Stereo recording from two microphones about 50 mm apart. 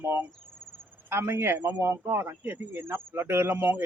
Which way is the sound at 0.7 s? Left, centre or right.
Right.